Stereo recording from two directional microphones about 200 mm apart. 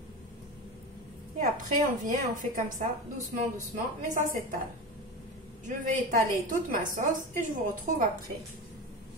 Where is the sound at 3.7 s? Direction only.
40° right (ahead or behind).